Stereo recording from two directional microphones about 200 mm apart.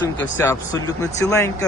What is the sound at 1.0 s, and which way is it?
Speech, 15° left (ahead or behind).